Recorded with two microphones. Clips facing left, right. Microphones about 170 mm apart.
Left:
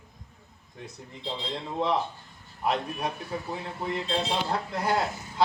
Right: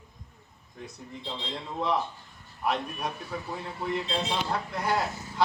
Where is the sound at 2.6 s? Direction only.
25° left (ahead or behind).